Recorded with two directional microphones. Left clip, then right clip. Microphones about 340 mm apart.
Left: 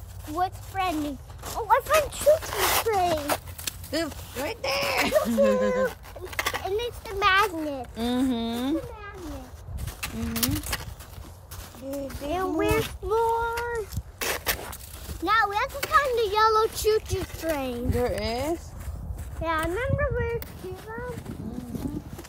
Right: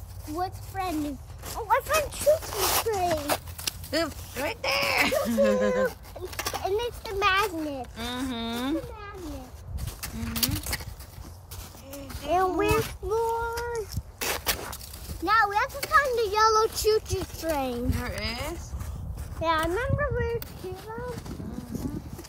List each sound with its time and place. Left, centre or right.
0.3 s a child's voice: centre
2.3 s speech: centre
7.9 s a child's voice: centre
10.2 s speech: centre
12.3 s speech: centre
13.1 s a sound: centre
15.0 s a child's voice: centre
18.0 s a child's voice: centre
19.4 s speech: centre